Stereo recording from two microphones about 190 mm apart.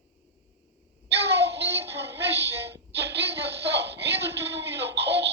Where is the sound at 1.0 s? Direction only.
60° right (ahead or behind).